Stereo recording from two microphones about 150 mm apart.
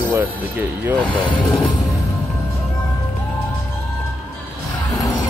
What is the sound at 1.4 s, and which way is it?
Music, 5° left (ahead or behind).